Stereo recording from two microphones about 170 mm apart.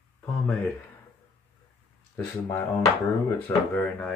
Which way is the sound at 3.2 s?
15° left (ahead or behind).